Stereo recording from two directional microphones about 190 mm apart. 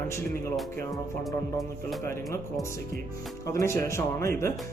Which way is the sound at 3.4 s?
15° left (ahead or behind).